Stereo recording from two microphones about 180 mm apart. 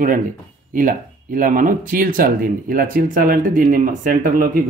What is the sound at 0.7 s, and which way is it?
Speech, 50° right (ahead or behind).